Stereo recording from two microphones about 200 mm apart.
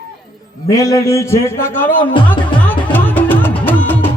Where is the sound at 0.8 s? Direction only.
15° left (ahead or behind).